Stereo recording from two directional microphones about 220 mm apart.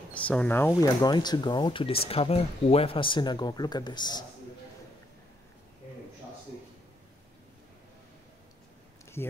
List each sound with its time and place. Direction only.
0.1 s speech: 5° left (ahead or behind)
0.8 s speech: 20° left (ahead or behind)